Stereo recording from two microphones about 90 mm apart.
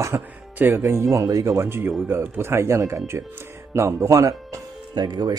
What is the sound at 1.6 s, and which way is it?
Speech, 25° right (ahead or behind).